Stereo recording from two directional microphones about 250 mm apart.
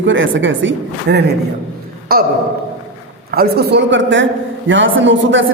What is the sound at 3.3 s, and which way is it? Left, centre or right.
A woman's voice, right.